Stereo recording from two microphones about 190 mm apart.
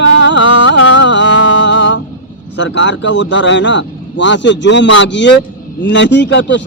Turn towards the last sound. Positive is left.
turn(degrees=70)  # may be behind; listen again after turning